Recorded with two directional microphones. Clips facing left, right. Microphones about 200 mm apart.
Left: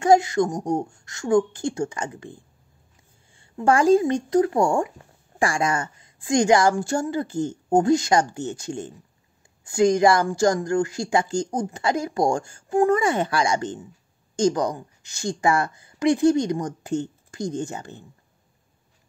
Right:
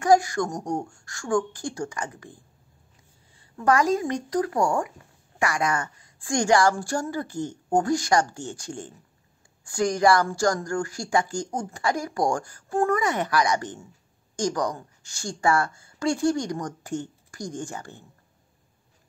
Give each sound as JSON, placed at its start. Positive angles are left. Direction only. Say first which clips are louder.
{"t": 0.0, "sound": "a woman's voice", "louder": "left 3 dB", "side_deg": 25}